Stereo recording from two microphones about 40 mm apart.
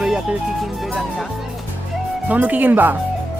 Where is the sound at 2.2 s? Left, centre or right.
Right.